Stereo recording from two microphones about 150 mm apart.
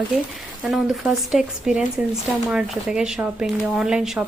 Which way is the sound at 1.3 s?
5° right (ahead or behind).